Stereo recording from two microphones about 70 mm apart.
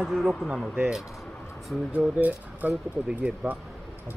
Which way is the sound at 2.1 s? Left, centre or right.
Right.